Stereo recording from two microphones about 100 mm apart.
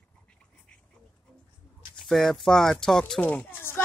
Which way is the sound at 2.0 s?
5° left (ahead or behind).